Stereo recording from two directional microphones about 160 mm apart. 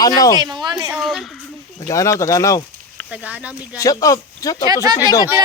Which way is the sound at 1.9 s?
20° left (ahead or behind).